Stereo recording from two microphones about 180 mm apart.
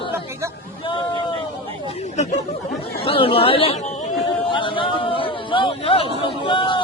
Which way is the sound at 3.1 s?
30° left (ahead or behind).